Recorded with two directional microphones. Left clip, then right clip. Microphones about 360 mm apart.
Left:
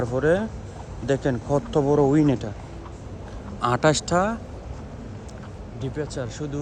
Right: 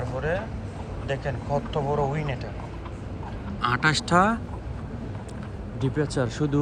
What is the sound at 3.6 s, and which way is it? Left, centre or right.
Speech, centre.